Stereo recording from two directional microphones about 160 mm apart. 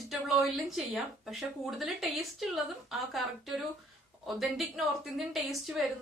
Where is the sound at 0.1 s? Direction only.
Centre (ahead or behind).